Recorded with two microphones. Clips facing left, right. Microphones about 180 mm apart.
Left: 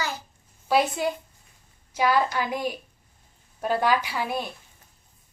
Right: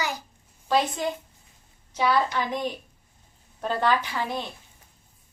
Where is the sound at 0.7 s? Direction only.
10° left (ahead or behind).